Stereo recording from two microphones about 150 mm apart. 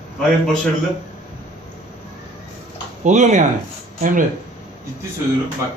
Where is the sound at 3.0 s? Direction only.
55° right (ahead or behind).